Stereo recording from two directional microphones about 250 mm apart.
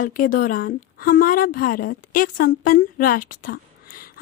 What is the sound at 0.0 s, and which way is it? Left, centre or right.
A woman's voice, left.